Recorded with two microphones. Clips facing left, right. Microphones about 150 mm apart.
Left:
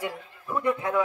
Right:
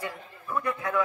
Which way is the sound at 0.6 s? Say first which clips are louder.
Left 5 dB; 20° left (ahead or behind).